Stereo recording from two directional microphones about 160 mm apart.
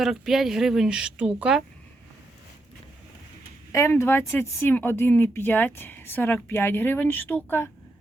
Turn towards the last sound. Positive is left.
turn(degrees=15)  # may be behind; listen again after turning